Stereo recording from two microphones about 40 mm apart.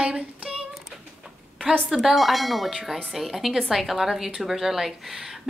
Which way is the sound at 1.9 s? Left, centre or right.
Centre.